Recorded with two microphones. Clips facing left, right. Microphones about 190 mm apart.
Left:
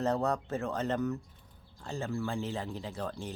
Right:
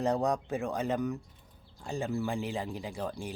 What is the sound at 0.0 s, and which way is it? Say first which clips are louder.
Speech: right 1 dB; 15° right (ahead or behind).